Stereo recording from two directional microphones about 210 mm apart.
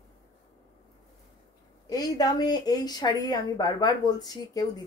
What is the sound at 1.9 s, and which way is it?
A woman's voice, 20° left (ahead or behind).